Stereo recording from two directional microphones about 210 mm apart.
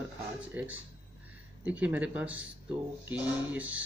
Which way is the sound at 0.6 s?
10° right (ahead or behind).